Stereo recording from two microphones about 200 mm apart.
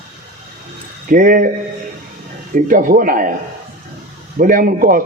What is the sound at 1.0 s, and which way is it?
Speech, 45° right (ahead or behind).